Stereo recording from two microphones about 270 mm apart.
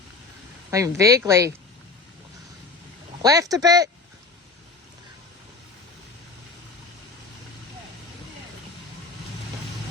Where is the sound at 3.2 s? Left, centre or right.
Centre.